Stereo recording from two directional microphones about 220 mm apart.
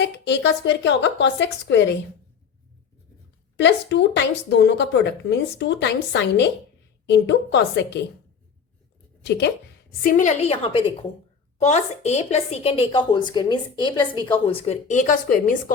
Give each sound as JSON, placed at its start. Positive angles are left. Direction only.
{"t": 0.0, "sound": "a woman's voice", "side_deg": 50}
{"t": 3.6, "sound": "a woman's voice", "side_deg": 50}
{"t": 10.0, "sound": "a woman's voice", "side_deg": 35}